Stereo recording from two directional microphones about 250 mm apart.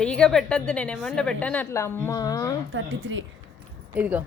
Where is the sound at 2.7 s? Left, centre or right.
Right.